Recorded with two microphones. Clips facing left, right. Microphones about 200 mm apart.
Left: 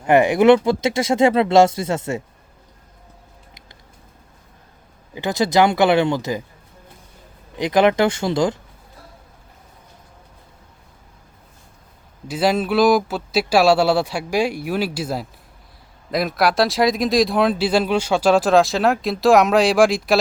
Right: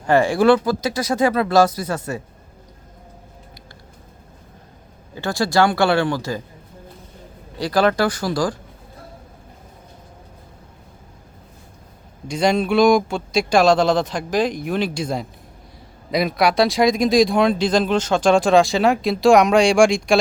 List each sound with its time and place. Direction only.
0.1 s speech: 20° left (ahead or behind)
5.1 s speech: 20° left (ahead or behind)
7.6 s speech: 20° left (ahead or behind)
12.3 s speech: 5° left (ahead or behind)